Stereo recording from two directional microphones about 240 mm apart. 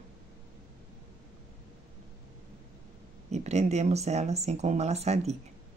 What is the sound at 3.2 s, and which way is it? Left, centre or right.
Speech, right.